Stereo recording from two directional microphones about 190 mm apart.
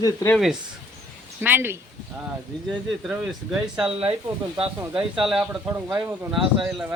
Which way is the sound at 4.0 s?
25° right (ahead or behind).